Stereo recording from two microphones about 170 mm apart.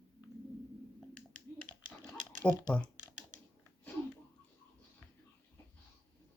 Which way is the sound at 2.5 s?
5° left (ahead or behind).